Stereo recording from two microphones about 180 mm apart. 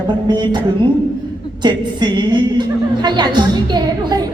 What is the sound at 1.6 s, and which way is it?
Speech, 25° right (ahead or behind).